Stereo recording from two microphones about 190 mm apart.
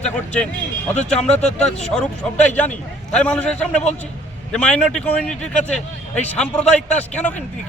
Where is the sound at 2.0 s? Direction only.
40° left (ahead or behind).